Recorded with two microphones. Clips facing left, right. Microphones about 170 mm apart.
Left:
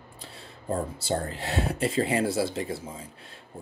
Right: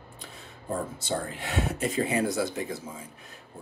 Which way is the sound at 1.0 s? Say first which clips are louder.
Left 2 dB; 35° left (ahead or behind).